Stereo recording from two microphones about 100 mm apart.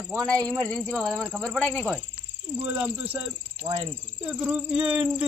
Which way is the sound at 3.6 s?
60° right (ahead or behind).